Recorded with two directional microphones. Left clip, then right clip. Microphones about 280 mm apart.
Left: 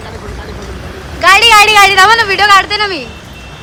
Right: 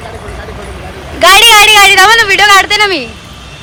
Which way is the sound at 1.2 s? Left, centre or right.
Centre.